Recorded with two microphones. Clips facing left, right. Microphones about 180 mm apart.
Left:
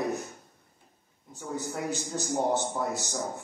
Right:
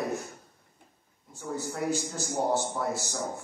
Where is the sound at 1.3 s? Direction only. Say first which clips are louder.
Even; 20° left (ahead or behind).